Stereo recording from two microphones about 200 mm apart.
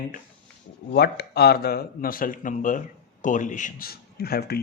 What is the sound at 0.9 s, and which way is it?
Speech, 55° left (ahead or behind).